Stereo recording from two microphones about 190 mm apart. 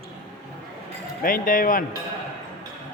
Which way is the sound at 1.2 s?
45° left (ahead or behind).